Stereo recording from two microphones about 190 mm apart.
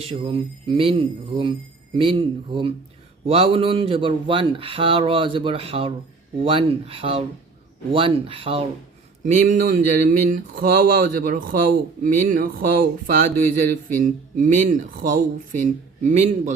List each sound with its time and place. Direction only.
0.1 s speech: 30° right (ahead or behind)
9.2 s speech: 40° right (ahead or behind)